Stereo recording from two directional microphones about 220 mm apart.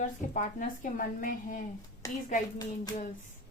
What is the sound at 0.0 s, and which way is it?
A woman's voice, 35° left (ahead or behind).